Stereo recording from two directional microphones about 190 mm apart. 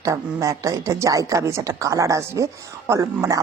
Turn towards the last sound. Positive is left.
turn(degrees=-15)  # may be behind; listen again after turning